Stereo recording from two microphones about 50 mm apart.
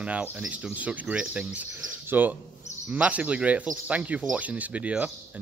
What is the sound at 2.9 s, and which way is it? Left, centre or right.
Speech, right.